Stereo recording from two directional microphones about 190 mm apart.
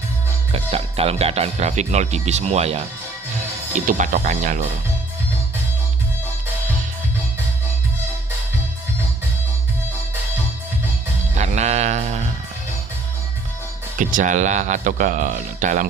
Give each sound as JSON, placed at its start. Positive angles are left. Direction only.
{"t": 0.5, "sound": "speech", "side_deg": -30}
{"t": 3.8, "sound": "speech", "side_deg": -40}
{"t": 11.3, "sound": "music", "side_deg": -35}
{"t": 14.0, "sound": "speech", "side_deg": -40}